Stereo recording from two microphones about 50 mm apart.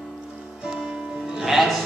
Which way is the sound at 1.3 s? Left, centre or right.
Centre.